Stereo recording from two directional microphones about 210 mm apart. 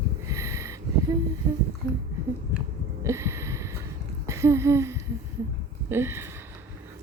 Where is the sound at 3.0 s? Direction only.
15° right (ahead or behind).